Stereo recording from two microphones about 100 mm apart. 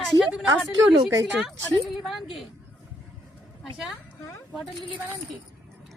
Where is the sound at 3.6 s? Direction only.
5° right (ahead or behind).